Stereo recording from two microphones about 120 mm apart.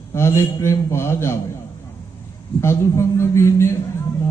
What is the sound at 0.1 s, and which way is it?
A man's voice, 20° left (ahead or behind).